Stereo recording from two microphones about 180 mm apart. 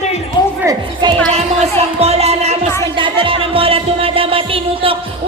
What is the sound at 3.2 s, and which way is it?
Music, 30° right (ahead or behind).